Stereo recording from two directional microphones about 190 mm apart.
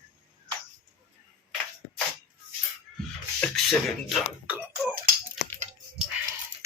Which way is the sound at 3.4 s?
Centre (ahead or behind).